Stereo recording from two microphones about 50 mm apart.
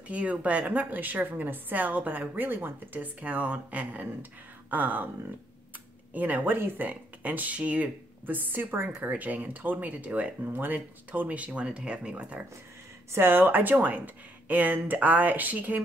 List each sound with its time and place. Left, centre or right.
0.1 s a woman's voice: right
6.1 s a woman's voice: right
6.9 s a woman's voice: right
10.4 s speech: right
13.1 s a woman's voice: right